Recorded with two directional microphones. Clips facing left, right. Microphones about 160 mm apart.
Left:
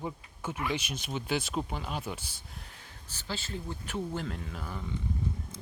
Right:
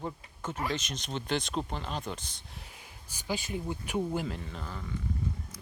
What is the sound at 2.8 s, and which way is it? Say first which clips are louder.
Speech: even; 10° right (ahead or behind).